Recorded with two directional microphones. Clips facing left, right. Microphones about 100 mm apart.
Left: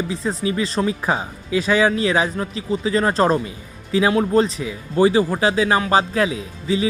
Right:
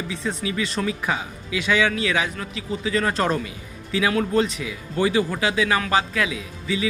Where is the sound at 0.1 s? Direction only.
35° left (ahead or behind).